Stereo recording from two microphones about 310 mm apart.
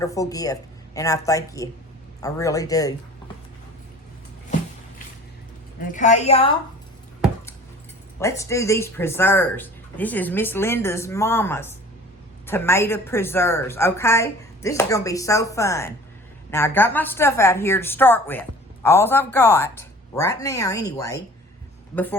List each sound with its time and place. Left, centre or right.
0.0 s speech: centre
5.9 s a woman's voice: left
8.2 s speech: centre